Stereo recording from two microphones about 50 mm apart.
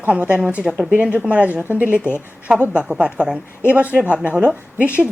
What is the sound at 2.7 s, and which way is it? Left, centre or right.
Speech, centre.